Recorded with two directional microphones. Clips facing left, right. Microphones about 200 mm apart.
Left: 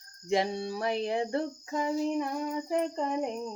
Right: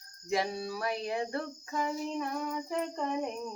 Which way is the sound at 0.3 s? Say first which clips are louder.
Left 3 dB; 25° left (ahead or behind).